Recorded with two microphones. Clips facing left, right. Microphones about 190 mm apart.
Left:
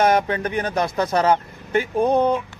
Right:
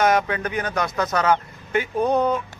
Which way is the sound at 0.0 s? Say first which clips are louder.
Left 2 dB; 30° left (ahead or behind).